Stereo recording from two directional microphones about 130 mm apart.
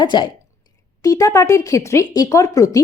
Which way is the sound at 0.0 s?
35° left (ahead or behind).